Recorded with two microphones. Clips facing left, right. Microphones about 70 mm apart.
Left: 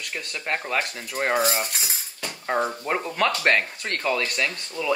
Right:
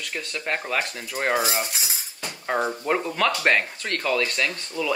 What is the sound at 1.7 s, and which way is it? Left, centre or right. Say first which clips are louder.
Cutlery: even; left.